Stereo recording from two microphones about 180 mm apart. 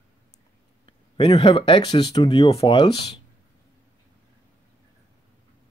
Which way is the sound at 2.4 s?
30° left (ahead or behind).